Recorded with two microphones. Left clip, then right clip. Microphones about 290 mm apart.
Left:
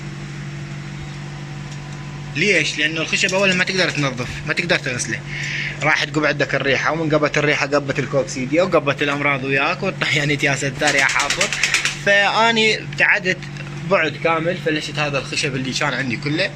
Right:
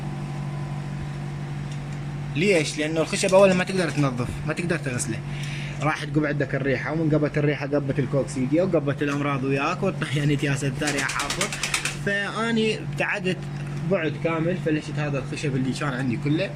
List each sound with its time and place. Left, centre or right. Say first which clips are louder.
2.3 s speech: left 5 dB; centre
5.5 s a sound: left 9 dB; centre
6.1 s speech: left 7 dB; left
9.0 s speech: left 7 dB; centre
14.3 s speech: left 6 dB; left
15.4 s speech: left 7 dB; centre